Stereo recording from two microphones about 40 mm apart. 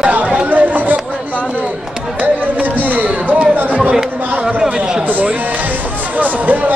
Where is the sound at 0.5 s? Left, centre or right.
Right.